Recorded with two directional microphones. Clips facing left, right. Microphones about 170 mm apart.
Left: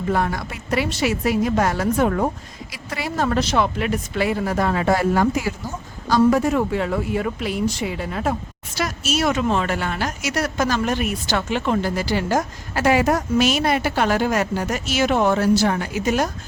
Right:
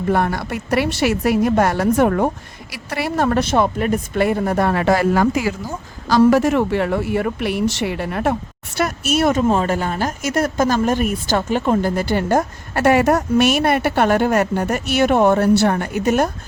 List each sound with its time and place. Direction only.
0.1 s a woman's voice: 60° right (ahead or behind)